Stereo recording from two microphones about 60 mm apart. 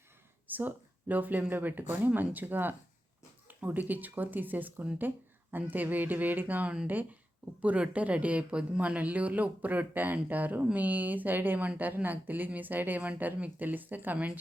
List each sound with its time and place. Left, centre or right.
0.4 s a woman's voice: right